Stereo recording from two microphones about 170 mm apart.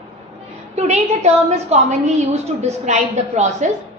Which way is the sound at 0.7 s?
40° right (ahead or behind).